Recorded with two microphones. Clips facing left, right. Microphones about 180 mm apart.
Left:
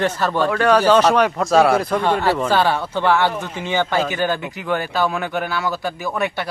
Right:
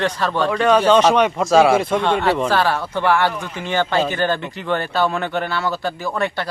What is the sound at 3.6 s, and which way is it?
Speech, 10° left (ahead or behind).